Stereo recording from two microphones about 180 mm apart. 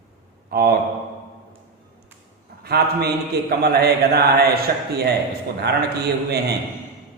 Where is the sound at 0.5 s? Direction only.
60° right (ahead or behind).